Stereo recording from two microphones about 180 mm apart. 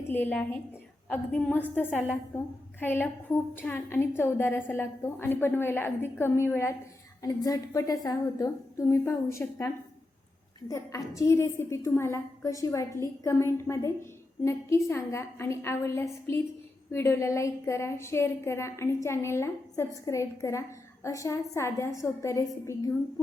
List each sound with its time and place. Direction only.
0.1 s a woman's voice: 10° left (ahead or behind)